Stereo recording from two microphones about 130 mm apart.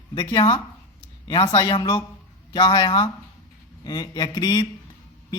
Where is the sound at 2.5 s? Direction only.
30° left (ahead or behind).